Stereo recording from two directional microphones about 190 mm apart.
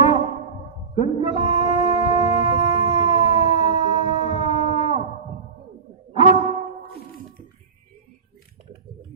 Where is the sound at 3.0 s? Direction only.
25° right (ahead or behind).